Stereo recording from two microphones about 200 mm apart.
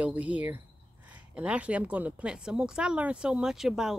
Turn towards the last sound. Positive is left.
turn(degrees=0)  # may be behind; listen again after turning